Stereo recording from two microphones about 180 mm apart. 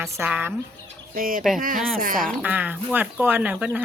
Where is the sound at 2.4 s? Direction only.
10° right (ahead or behind).